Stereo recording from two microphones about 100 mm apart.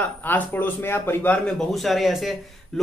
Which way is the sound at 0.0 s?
20° left (ahead or behind).